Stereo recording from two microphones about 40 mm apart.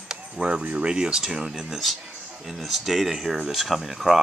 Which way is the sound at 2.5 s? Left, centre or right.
Centre.